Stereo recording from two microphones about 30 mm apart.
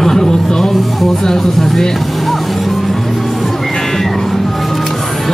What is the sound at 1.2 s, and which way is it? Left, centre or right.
Speech, centre.